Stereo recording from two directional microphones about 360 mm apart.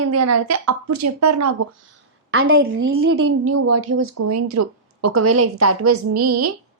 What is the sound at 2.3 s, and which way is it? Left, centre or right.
Speech, right.